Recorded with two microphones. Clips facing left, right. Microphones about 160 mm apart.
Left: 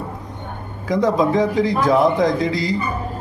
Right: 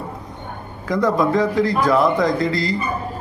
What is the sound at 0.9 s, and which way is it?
A man's voice, 20° left (ahead or behind).